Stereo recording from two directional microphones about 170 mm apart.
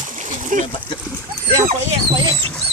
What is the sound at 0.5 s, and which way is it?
Speech, 50° right (ahead or behind).